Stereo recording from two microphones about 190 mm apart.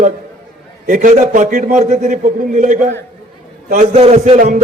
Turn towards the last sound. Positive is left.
turn(degrees=-30)  # may be behind; listen again after turning